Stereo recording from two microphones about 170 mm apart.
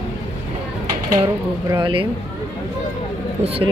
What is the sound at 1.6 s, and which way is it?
Speech, 25° right (ahead or behind).